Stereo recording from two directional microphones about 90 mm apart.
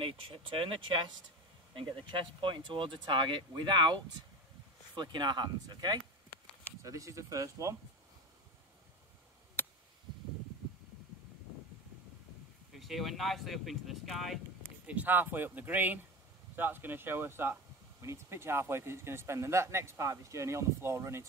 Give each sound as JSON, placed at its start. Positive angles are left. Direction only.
{"t": 0.0, "sound": "speech", "side_deg": -90}
{"t": 2.0, "sound": "speech", "side_deg": -65}
{"t": 6.8, "sound": "speech", "side_deg": -35}
{"t": 12.7, "sound": "speech", "side_deg": 0}
{"t": 14.9, "sound": "speech", "side_deg": -20}